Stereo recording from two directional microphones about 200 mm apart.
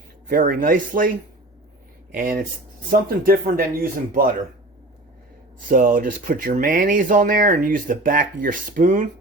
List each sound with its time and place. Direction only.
0.3 s speech: 45° right (ahead or behind)
2.1 s speech: 45° right (ahead or behind)
5.6 s speech: 40° right (ahead or behind)